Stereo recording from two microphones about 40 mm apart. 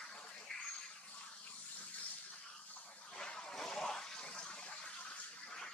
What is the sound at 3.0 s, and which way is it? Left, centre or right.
Toilet flush, centre.